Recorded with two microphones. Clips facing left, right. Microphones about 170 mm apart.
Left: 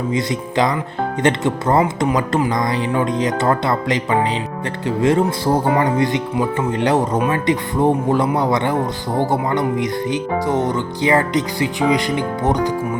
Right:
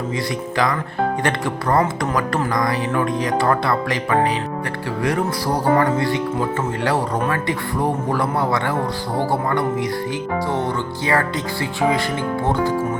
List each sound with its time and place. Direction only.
0.1 s speech: 20° left (ahead or behind)